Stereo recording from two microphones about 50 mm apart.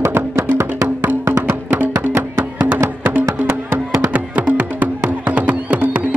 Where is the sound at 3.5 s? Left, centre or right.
Right.